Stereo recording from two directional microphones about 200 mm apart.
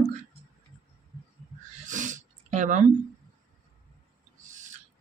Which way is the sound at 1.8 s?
40° right (ahead or behind).